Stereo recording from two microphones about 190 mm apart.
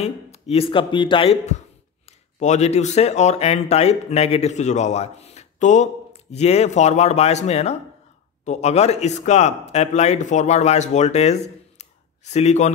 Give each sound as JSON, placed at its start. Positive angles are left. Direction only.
{"t": 0.0, "sound": "speech", "side_deg": 30}